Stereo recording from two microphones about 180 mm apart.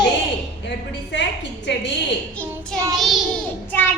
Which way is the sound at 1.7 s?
75° left (ahead or behind).